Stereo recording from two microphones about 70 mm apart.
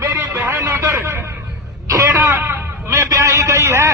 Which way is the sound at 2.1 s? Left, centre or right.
Right.